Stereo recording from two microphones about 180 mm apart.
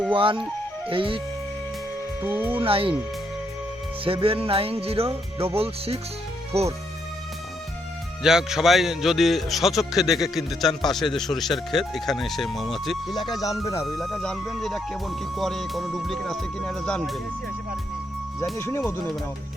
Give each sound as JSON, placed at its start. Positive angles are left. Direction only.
{"t": 0.1, "sound": "speech", "side_deg": -30}
{"t": 2.2, "sound": "speech", "side_deg": -10}
{"t": 2.6, "sound": "speech", "side_deg": -30}
{"t": 4.0, "sound": "music", "side_deg": -30}
{"t": 8.2, "sound": "speech", "side_deg": -5}
{"t": 13.3, "sound": "speech", "side_deg": 20}
{"t": 13.8, "sound": "speech", "side_deg": 0}
{"t": 18.5, "sound": "speech", "side_deg": 15}